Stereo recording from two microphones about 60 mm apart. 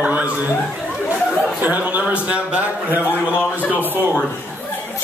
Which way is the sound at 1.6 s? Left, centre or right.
Right.